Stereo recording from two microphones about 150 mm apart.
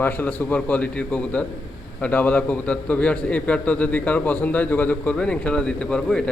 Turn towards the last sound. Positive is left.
turn(degrees=5)  # may be behind; listen again after turning